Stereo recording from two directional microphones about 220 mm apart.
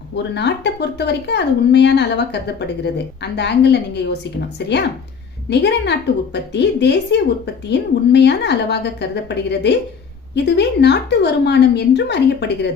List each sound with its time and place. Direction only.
0.2 s speech: 50° left (ahead or behind)
5.5 s speech: 50° left (ahead or behind)